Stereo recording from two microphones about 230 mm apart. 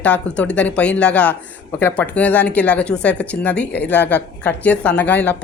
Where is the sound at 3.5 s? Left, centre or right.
Left.